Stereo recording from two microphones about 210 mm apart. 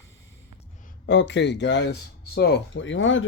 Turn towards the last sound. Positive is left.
turn(degrees=65)  # may be behind; listen again after turning